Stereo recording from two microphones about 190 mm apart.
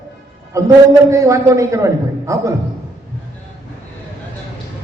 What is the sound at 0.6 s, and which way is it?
A man's voice, 15° right (ahead or behind).